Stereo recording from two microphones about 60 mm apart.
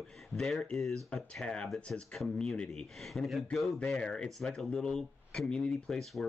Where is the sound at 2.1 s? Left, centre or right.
Centre.